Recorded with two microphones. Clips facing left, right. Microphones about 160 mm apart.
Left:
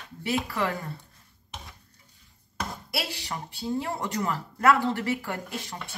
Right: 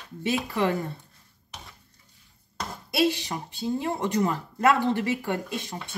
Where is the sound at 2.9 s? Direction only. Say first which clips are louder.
Right 14 dB; 20° right (ahead or behind).